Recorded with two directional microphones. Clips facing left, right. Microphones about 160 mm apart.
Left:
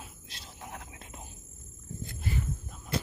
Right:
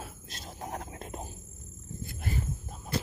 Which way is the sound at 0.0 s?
45° right (ahead or behind).